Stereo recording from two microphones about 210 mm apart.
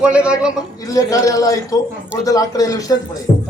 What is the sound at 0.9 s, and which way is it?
A man's voice, 15° left (ahead or behind).